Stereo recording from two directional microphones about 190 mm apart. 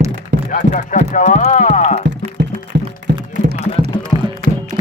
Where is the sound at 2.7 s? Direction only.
65° right (ahead or behind).